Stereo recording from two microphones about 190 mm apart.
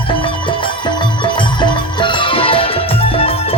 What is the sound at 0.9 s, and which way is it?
Music, 25° left (ahead or behind).